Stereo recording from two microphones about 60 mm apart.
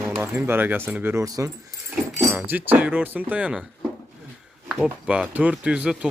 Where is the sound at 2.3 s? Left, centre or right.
Right.